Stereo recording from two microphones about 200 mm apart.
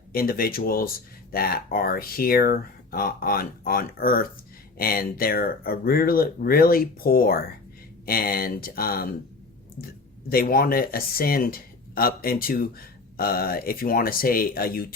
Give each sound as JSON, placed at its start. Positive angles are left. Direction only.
{"t": 0.1, "sound": "speech", "side_deg": 50}